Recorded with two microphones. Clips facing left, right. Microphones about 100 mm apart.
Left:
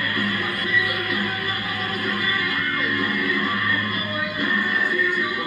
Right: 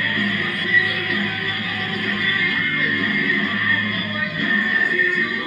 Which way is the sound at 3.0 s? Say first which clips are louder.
Right 1 dB; 25° left (ahead or behind).